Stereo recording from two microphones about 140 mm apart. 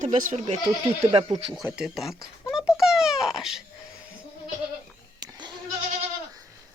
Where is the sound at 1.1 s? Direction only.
40° right (ahead or behind).